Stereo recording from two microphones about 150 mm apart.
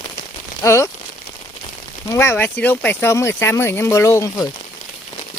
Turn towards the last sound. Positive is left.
turn(degrees=20)  # may be behind; listen again after turning